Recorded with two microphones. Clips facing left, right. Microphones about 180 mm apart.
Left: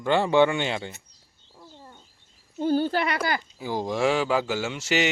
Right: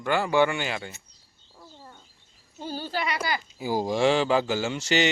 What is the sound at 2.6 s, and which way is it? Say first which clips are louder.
Speech: left 8 dB; 55° left (ahead or behind).